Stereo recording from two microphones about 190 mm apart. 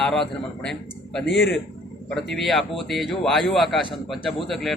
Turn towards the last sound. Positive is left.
turn(degrees=0)  # may be behind; listen again after turning